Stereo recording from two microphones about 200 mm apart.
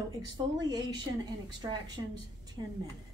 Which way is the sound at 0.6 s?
20° right (ahead or behind).